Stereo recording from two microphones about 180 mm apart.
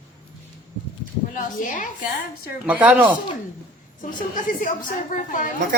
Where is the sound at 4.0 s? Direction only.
45° left (ahead or behind).